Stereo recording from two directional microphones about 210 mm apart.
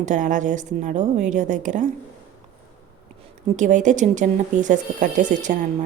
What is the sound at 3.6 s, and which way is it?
A woman's voice, 35° right (ahead or behind).